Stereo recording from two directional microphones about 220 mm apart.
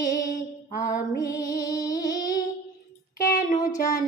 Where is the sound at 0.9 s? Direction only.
15° left (ahead or behind).